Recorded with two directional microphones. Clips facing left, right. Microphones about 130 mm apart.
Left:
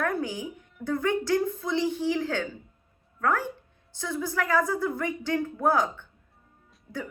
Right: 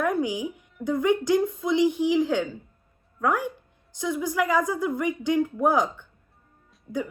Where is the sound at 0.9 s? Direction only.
15° right (ahead or behind).